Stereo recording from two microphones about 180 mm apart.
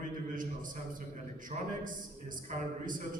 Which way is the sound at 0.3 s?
50° right (ahead or behind).